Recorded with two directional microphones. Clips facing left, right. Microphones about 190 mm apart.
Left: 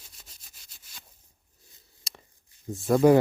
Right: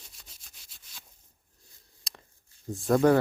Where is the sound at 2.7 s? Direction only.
Centre (ahead or behind).